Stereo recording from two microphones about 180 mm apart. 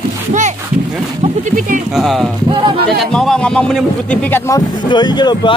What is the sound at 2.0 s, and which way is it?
Speech, centre (ahead or behind).